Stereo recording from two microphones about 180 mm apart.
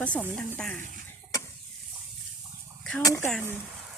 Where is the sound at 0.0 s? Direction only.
10° left (ahead or behind).